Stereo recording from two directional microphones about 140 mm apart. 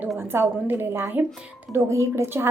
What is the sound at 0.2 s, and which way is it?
A woman's voice, 15° right (ahead or behind).